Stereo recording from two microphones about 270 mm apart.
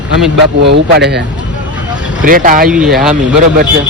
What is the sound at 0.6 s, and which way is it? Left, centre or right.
Speech, right.